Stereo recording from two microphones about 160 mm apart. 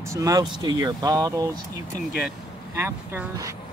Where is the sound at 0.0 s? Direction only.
20° right (ahead or behind).